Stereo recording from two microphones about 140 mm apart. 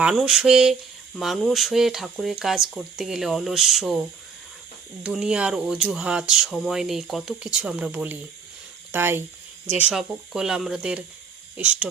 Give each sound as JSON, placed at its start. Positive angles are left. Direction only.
{"t": 0.0, "sound": "speech", "side_deg": -5}
{"t": 5.0, "sound": "speech", "side_deg": -5}